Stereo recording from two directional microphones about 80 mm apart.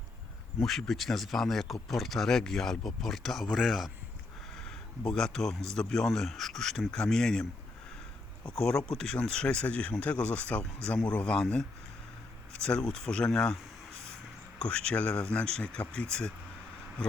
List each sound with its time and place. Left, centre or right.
0.6 s speech: centre
8.4 s speech: centre
12.6 s speech: centre
14.6 s speech: centre